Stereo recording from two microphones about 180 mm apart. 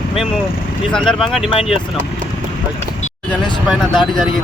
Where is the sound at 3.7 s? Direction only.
5° left (ahead or behind).